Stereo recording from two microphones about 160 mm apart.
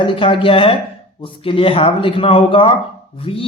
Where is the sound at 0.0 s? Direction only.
35° left (ahead or behind).